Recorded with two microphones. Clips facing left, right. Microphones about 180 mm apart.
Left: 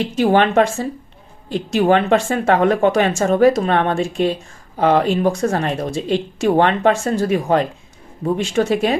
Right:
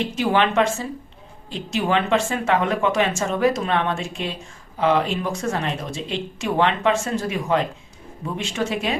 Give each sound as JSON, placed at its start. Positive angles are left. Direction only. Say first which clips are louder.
{"t": 0.2, "sound": "speech", "louder": "left 6 dB", "side_deg": 45}
{"t": 2.1, "sound": "speech", "louder": "left 4 dB", "side_deg": 35}
{"t": 2.5, "sound": "speech", "louder": "left 7 dB", "side_deg": 45}
{"t": 3.7, "sound": "speech", "louder": "left 6 dB", "side_deg": 45}